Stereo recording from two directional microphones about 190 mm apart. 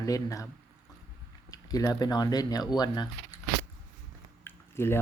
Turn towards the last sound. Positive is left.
turn(degrees=10)  # may be behind; listen again after turning